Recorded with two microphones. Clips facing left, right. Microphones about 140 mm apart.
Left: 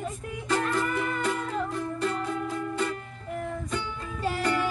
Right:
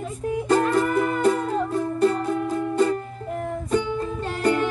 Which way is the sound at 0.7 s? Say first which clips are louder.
Right 7 dB; 45° right (ahead or behind).